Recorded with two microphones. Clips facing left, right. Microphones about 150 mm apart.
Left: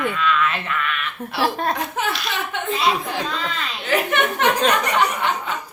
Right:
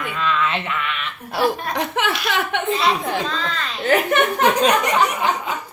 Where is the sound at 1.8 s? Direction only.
80° right.